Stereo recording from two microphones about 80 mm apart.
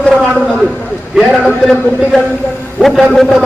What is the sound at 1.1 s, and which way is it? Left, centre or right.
A man's voice, centre.